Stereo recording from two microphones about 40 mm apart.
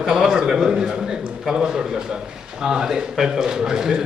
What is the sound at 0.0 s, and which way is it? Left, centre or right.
A man's voice, centre.